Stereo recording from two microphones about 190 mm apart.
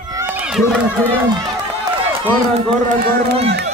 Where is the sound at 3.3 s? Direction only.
60° right (ahead or behind).